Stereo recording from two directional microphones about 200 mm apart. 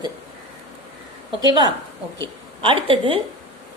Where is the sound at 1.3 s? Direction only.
20° right (ahead or behind).